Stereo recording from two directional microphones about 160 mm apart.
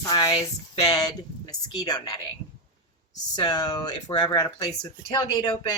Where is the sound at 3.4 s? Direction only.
25° left (ahead or behind).